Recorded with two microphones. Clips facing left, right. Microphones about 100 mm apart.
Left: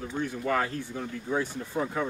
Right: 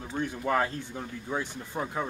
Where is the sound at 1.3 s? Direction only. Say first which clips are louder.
Left 4 dB; 10° right (ahead or behind).